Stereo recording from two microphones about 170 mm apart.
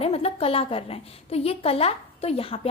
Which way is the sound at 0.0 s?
35° left (ahead or behind).